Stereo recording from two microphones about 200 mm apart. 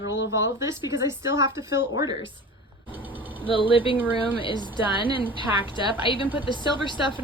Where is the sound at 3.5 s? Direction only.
25° left (ahead or behind).